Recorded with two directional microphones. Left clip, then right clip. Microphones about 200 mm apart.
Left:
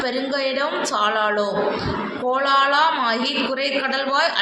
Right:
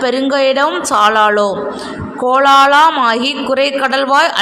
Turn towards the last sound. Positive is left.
turn(degrees=-55)  # may be behind; listen again after turning